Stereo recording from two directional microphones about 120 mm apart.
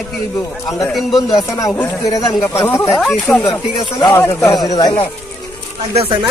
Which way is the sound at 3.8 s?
40° left (ahead or behind).